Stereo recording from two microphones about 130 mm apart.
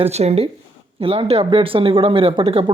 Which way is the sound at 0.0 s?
55° right (ahead or behind).